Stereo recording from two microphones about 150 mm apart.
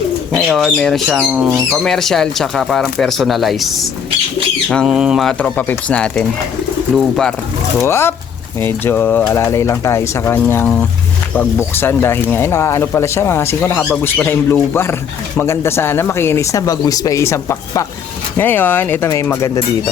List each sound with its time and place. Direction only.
0.3 s speech: centre (ahead or behind)
7.8 s speech: 15° left (ahead or behind)
11.7 s speech: 15° left (ahead or behind)